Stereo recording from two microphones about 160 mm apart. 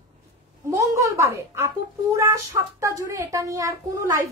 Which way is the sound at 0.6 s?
20° right (ahead or behind).